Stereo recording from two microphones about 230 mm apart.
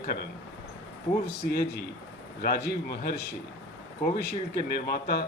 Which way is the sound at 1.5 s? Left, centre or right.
Left.